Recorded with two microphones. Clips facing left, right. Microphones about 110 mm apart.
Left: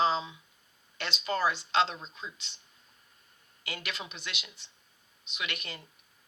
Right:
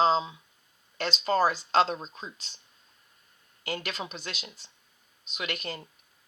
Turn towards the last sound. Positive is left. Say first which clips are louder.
# right 4 dB
turn(degrees=-40)  # may be behind; listen again after turning